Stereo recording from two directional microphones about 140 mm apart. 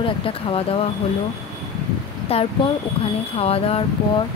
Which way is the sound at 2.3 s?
45° left (ahead or behind).